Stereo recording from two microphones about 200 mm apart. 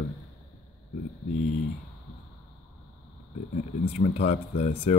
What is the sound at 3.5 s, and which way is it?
Speech, 35° left (ahead or behind).